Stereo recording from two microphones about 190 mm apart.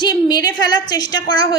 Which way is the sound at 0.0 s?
20° left (ahead or behind).